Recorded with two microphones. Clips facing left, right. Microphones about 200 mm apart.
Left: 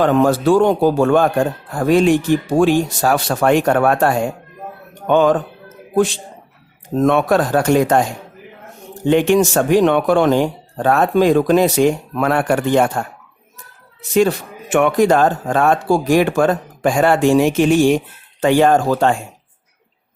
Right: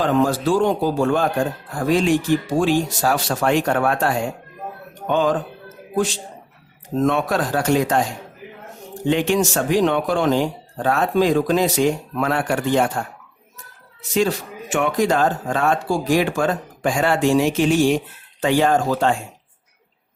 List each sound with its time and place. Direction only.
0.0 s speech: 60° left (ahead or behind)
7.0 s speech: 60° left (ahead or behind)
9.0 s speech: 55° left (ahead or behind)
14.1 s speech: 55° left (ahead or behind)